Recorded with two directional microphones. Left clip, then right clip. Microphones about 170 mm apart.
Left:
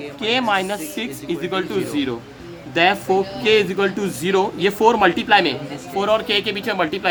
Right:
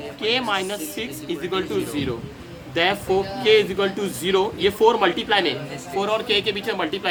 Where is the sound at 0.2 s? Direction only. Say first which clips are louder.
Left 3 dB; 50° left (ahead or behind).